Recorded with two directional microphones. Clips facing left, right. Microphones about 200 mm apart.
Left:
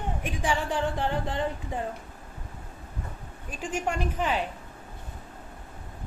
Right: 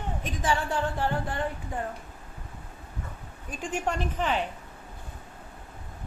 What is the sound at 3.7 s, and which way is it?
Speech, 10° left (ahead or behind).